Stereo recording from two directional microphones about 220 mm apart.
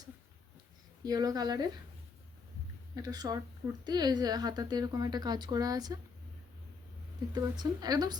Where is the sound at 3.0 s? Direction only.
15° right (ahead or behind).